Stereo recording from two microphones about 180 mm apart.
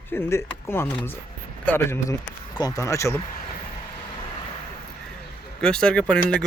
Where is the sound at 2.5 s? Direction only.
20° left (ahead or behind).